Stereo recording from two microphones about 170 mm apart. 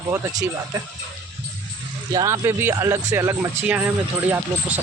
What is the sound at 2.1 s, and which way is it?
Speech, 20° right (ahead or behind).